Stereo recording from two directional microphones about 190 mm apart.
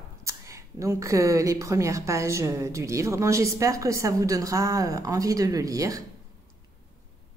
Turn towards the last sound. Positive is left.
turn(degrees=-20)  # may be behind; listen again after turning